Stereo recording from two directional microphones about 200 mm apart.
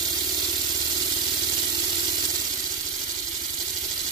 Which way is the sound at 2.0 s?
20° right (ahead or behind).